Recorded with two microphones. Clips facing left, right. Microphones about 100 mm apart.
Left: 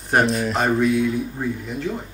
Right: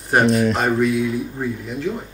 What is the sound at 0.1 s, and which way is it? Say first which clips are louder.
Speech: right 3 dB; centre (ahead or behind).